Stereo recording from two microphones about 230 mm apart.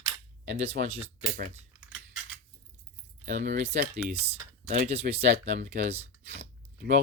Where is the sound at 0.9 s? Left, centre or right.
Right.